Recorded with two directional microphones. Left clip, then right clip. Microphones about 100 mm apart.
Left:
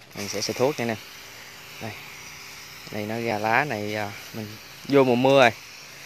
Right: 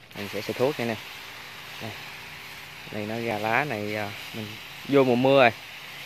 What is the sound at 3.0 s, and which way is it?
Speech, 30° left (ahead or behind).